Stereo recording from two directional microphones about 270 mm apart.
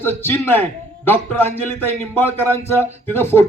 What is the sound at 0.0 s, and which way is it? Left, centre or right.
A man's voice, centre.